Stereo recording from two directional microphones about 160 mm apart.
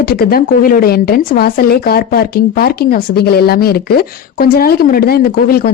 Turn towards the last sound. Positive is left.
turn(degrees=70)  # may be behind; listen again after turning